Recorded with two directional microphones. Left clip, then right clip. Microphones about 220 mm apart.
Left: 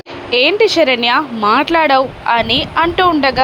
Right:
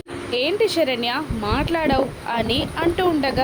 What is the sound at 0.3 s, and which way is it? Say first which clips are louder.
Speech: left 9 dB; 15° left (ahead or behind).